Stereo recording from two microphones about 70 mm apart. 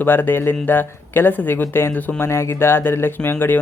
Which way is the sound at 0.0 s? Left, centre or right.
Left.